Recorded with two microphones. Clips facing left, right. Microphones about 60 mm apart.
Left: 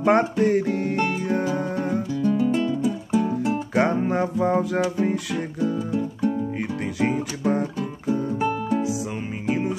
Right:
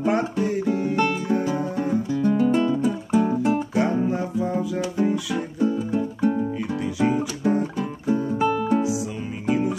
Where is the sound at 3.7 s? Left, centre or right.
Left.